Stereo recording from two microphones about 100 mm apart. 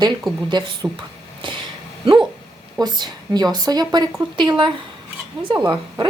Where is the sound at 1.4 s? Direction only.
55° right (ahead or behind).